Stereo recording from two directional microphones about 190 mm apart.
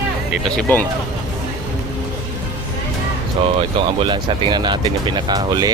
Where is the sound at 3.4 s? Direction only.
30° right (ahead or behind).